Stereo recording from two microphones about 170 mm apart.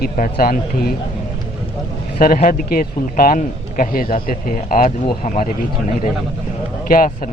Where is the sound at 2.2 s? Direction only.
55° left (ahead or behind).